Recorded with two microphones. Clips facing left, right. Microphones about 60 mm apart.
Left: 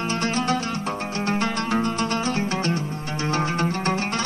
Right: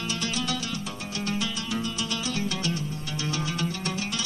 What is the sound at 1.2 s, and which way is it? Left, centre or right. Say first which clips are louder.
Music: left 6 dB; left.